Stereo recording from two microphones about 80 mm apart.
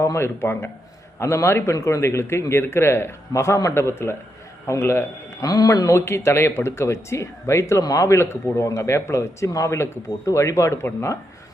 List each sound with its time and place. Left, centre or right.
0.0 s speech: left
5.4 s speech: left